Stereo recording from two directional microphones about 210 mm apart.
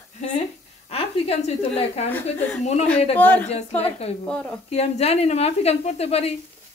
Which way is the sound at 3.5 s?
30° left (ahead or behind).